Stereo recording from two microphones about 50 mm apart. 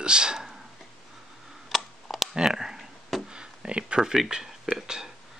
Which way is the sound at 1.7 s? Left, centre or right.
Centre.